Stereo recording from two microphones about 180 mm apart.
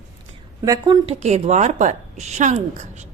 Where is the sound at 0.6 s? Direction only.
20° right (ahead or behind).